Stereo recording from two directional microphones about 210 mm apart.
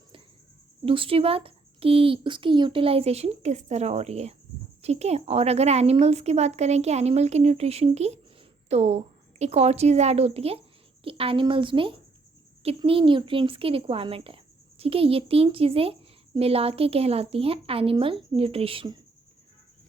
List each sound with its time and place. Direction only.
0.9 s a woman's voice: 25° right (ahead or behind)